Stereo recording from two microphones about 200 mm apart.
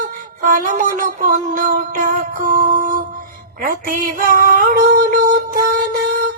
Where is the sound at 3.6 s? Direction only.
45° right (ahead or behind).